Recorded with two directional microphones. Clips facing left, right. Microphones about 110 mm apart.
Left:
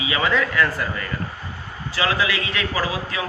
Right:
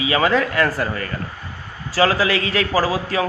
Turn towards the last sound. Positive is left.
turn(degrees=-35)  # may be behind; listen again after turning